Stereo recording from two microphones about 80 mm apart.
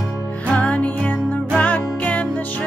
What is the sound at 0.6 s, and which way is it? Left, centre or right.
Music, centre.